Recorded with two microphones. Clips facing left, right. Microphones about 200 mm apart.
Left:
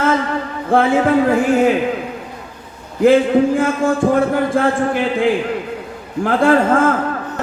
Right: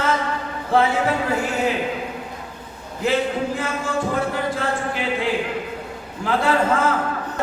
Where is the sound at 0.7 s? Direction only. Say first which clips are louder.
Left 6 dB; 50° left (ahead or behind).